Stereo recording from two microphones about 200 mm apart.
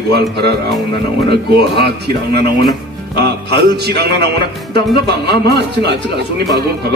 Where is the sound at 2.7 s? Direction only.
55° right (ahead or behind).